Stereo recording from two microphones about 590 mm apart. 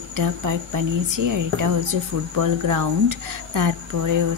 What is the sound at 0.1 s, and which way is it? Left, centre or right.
A woman's voice, right.